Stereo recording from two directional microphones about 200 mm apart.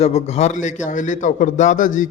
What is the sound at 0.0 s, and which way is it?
A man's voice, 30° left (ahead or behind).